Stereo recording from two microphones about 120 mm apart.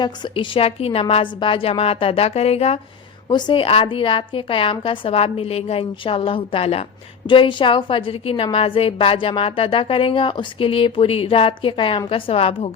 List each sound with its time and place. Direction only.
0.0 s a woman's voice: 40° left (ahead or behind); by 2.8 s 55° left (ahead or behind)
3.2 s a woman's voice: 35° left (ahead or behind); by 6.8 s 55° left (ahead or behind)
7.3 s a woman's voice: 45° left (ahead or behind)